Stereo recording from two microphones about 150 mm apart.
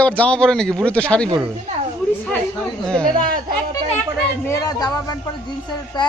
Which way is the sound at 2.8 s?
5° left (ahead or behind).